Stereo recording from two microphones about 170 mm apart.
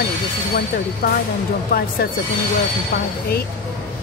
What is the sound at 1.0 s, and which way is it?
Speech, 60° left (ahead or behind).